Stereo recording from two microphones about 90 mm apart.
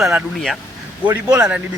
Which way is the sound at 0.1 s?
10° right (ahead or behind).